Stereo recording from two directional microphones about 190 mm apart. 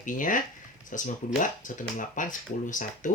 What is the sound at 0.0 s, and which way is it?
Speech, 45° left (ahead or behind).